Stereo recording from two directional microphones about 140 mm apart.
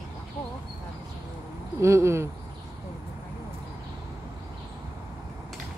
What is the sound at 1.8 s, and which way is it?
Speech, 20° right (ahead or behind).